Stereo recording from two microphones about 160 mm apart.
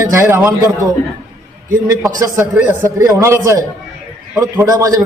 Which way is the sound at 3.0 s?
20° right (ahead or behind).